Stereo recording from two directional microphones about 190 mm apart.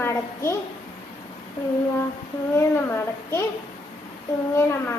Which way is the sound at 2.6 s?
15° left (ahead or behind).